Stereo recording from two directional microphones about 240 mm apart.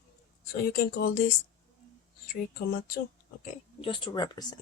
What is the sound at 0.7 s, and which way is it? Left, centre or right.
Speech, left.